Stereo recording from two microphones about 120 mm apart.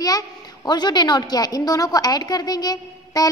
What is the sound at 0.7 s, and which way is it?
A woman's voice, 35° left (ahead or behind).